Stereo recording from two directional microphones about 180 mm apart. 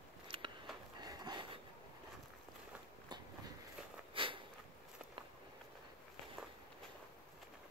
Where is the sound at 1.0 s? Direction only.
20° right (ahead or behind).